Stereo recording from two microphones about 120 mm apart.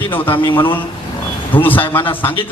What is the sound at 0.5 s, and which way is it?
Speech, 45° left (ahead or behind).